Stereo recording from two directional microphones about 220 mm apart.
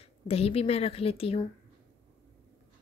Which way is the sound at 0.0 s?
25° left (ahead or behind).